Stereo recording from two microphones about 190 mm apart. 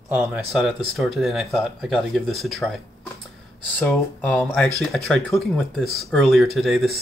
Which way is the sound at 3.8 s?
10° left (ahead or behind).